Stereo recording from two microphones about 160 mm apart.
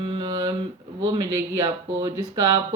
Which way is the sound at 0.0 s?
35° right (ahead or behind).